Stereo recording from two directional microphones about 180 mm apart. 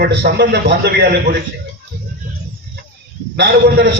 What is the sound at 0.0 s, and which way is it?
A man's voice, 65° right (ahead or behind).